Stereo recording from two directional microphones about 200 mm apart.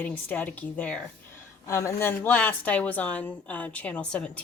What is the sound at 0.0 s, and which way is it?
Speech, 10° left (ahead or behind).